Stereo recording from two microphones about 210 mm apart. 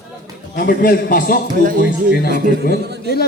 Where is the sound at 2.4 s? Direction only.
45° left (ahead or behind).